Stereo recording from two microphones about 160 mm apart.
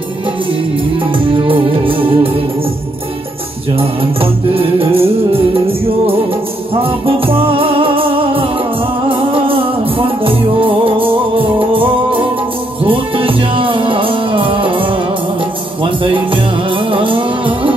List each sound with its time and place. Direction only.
1.3 s music: 35° right (ahead or behind)
4.2 s music: 35° right (ahead or behind)
6.7 s music: 35° right (ahead or behind)
15.8 s music: 30° right (ahead or behind)